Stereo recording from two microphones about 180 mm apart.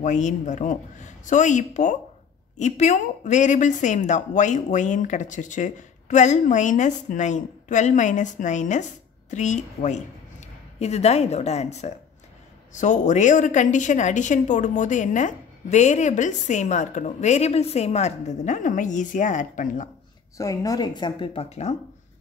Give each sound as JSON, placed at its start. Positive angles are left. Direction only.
{"t": 0.0, "sound": "a woman's voice", "side_deg": 40}
{"t": 20.3, "sound": "speech", "side_deg": 20}